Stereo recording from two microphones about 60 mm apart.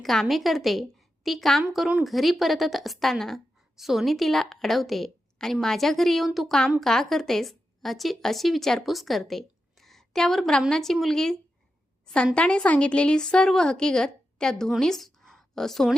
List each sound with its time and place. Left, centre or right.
0.0 s a woman's voice: centre
9.8 s a sound: centre
10.7 s a woman's voice: centre